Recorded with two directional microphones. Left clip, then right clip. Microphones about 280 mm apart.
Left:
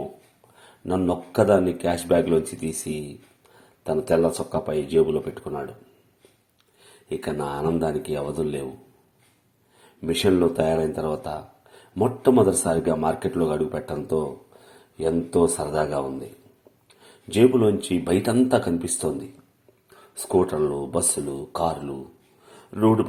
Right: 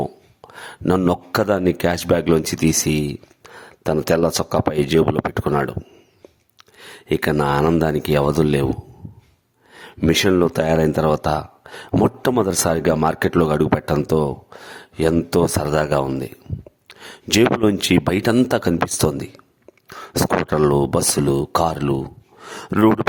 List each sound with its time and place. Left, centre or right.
0.4 s speech: right
6.7 s speech: right
9.7 s speech: right
20.5 s speech: right